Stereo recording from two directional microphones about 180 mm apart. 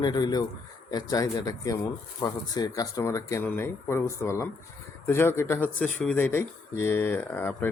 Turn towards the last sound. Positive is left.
turn(degrees=10)  # may be behind; listen again after turning